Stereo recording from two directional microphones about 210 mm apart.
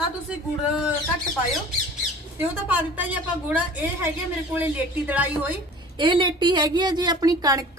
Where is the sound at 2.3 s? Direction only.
10° right (ahead or behind).